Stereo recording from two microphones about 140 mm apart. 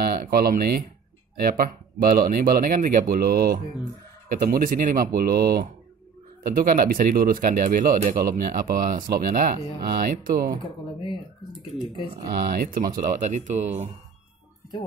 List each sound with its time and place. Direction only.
0.0 s speech: 90° right
12.3 s speech: 90° right; by 13.8 s 55° right (ahead or behind)